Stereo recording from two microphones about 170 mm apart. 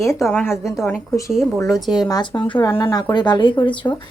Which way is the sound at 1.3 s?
Centre (ahead or behind).